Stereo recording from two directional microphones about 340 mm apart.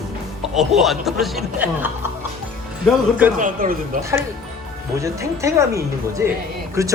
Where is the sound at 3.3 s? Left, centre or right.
Right.